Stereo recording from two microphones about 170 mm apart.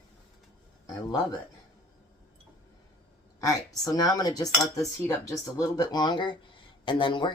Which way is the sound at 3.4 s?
20° left (ahead or behind).